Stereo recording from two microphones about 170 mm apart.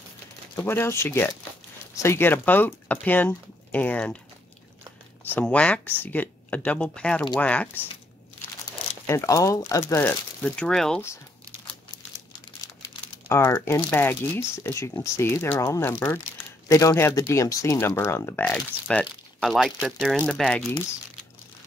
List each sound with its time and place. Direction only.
0.6 s speech: 15° left (ahead or behind)
5.2 s speech: 10° left (ahead or behind)
9.0 s speech: 15° left (ahead or behind)
13.3 s speech: 15° left (ahead or behind)